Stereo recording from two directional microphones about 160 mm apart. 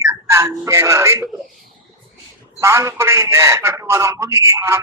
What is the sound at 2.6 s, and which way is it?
Speech, 15° right (ahead or behind).